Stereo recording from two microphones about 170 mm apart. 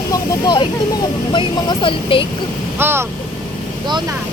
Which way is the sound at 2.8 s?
15° right (ahead or behind).